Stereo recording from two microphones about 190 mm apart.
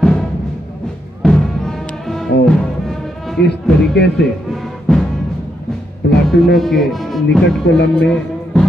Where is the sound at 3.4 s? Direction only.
60° left (ahead or behind).